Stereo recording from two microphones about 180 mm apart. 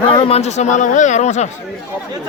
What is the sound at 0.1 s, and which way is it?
A man's voice, 30° left (ahead or behind).